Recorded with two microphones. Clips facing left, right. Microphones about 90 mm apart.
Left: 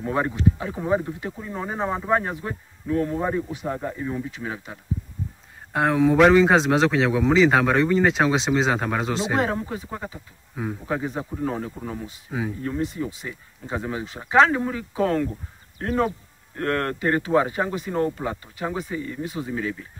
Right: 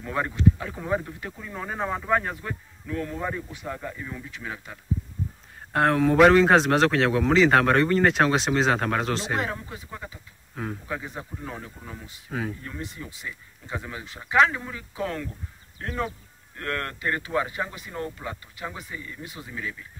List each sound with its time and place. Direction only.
0.0 s speech: 20° left (ahead or behind)
5.7 s a man's voice: 10° left (ahead or behind)
9.4 s speech: 35° left (ahead or behind)
10.5 s speech: 10° left (ahead or behind)
10.9 s speech: 30° left (ahead or behind)
11.3 s speech: 40° left (ahead or behind)
12.3 s speech: 10° left (ahead or behind)
12.6 s speech: 30° left (ahead or behind)